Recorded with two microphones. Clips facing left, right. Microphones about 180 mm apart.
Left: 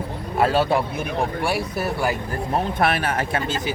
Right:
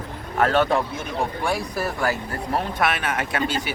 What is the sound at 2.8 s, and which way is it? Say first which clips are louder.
Speech: left 2 dB; 35° left (ahead or behind).